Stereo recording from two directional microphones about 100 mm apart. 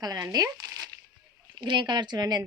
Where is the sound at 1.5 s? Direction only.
50° right (ahead or behind).